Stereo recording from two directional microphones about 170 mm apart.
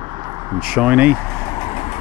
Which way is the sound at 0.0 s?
25° right (ahead or behind).